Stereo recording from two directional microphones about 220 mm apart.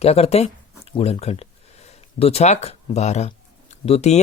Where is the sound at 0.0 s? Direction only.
30° left (ahead or behind).